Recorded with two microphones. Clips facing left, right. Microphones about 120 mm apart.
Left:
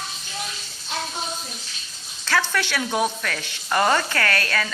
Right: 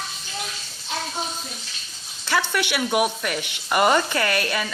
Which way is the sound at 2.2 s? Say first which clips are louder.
Even; 15° right (ahead or behind).